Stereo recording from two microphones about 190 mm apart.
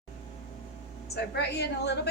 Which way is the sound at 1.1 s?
60° left (ahead or behind).